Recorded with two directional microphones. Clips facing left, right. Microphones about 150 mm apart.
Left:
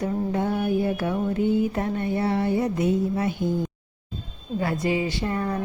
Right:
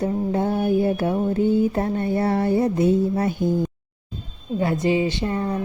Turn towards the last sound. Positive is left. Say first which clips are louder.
# right 2 dB
turn(degrees=-25)  # may be behind; listen again after turning